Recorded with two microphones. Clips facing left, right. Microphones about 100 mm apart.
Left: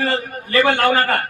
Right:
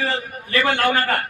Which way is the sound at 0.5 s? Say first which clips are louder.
Left 4 dB; 35° left (ahead or behind).